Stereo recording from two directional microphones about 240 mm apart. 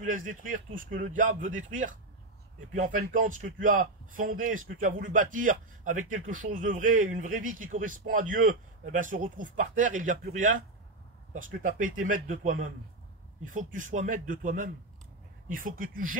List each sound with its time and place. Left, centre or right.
0.0 s speech: right